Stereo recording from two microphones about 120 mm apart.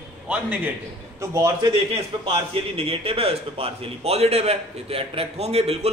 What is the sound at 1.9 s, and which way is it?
A man's voice, 55° right (ahead or behind).